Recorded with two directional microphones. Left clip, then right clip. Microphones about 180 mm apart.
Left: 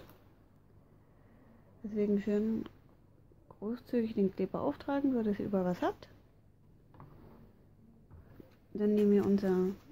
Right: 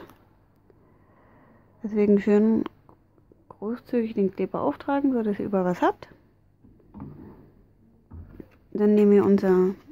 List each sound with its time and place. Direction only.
1.8 s speech: 30° right (ahead or behind)
3.4 s speech: 20° right (ahead or behind)
8.7 s speech: 25° right (ahead or behind)